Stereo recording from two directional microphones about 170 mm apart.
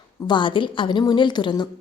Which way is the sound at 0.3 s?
30° left (ahead or behind).